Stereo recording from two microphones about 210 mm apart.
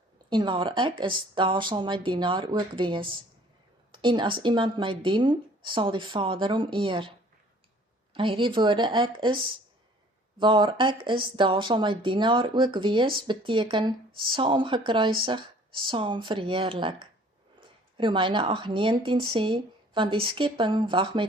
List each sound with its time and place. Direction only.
0.3 s speech: 20° right (ahead or behind)
8.1 s speech: 25° right (ahead or behind)
10.4 s speech: 20° right (ahead or behind)